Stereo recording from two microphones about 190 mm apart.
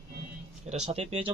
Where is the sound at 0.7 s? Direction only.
35° right (ahead or behind).